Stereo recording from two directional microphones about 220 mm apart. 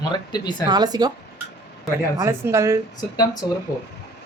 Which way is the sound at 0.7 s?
20° right (ahead or behind).